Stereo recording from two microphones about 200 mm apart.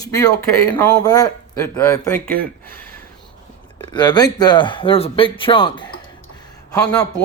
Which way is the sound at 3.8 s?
20° left (ahead or behind).